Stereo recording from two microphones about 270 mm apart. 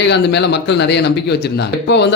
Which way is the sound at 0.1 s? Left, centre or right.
Left.